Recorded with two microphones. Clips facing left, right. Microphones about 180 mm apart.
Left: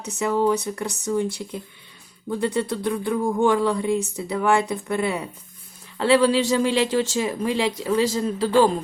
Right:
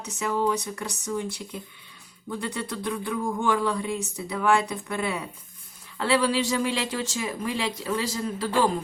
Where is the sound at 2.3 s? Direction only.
30° left (ahead or behind).